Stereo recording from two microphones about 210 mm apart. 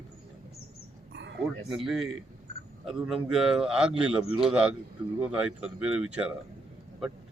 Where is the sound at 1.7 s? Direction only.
Centre (ahead or behind).